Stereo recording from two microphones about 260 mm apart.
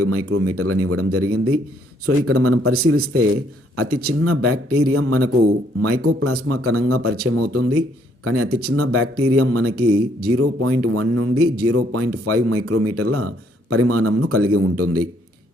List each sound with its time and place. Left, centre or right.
0.0 s speech: right